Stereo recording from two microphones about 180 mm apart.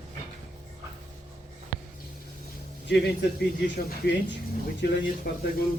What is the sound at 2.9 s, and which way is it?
Speech, 75° left (ahead or behind).